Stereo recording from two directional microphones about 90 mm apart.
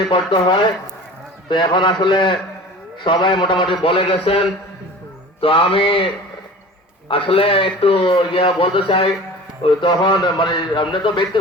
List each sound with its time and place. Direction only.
0.1 s a man's voice: 65° left (ahead or behind); by 4.4 s 90° left
5.4 s mantra: 90° left
7.1 s a man's voice: 90° left
9.6 s a man's voice: 60° left (ahead or behind)